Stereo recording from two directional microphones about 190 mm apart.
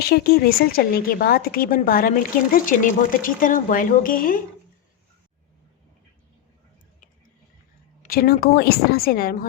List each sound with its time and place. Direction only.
0.1 s a woman's voice: 55° left (ahead or behind)
8.0 s a woman's voice: 50° left (ahead or behind)